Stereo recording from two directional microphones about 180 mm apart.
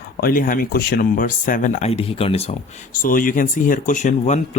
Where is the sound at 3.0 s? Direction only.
50° left (ahead or behind).